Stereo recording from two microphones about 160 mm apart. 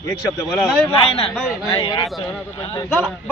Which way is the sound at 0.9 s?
40° left (ahead or behind).